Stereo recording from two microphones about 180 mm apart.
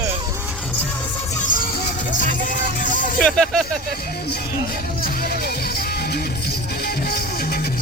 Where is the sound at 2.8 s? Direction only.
45° left (ahead or behind).